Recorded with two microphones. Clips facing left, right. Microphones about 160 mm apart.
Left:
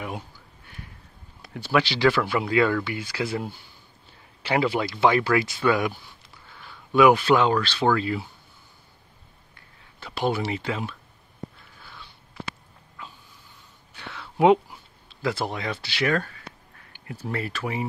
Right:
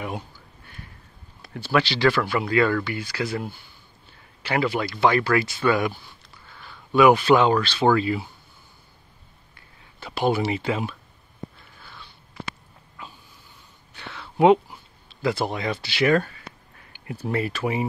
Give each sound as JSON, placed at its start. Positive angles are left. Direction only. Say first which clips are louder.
{"t": 1.4, "sound": "speech", "louder": "right 1 dB", "side_deg": 15}
{"t": 4.4, "sound": "a man's voice", "louder": "left 1 dB", "side_deg": 25}
{"t": 5.0, "sound": "speech", "louder": "even", "side_deg": 10}
{"t": 9.9, "sound": "speech", "louder": "right 3 dB", "side_deg": -10}
{"t": 13.9, "sound": "a sound", "louder": "right 2 dB", "side_deg": 0}
{"t": 15.2, "sound": "speech", "louder": "right 3 dB", "side_deg": -5}